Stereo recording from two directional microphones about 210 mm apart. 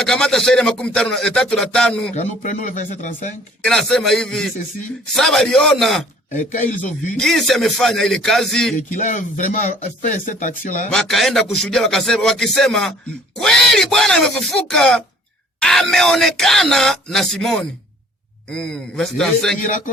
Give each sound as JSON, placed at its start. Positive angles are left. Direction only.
{"t": 0.0, "sound": "speech", "side_deg": 5}
{"t": 2.1, "sound": "speech", "side_deg": 35}
{"t": 3.6, "sound": "speech", "side_deg": 5}
{"t": 6.3, "sound": "speech", "side_deg": 40}
{"t": 7.2, "sound": "speech", "side_deg": 0}
{"t": 8.9, "sound": "speech", "side_deg": 35}
{"t": 10.9, "sound": "speech", "side_deg": 0}
{"t": 19.6, "sound": "speech", "side_deg": 40}